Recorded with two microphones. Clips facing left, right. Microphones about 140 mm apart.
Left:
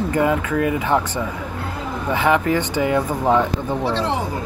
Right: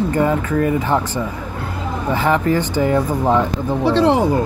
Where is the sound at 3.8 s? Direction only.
65° right (ahead or behind).